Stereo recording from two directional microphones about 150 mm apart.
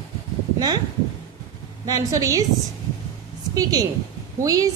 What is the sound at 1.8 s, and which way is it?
Speech, 25° right (ahead or behind).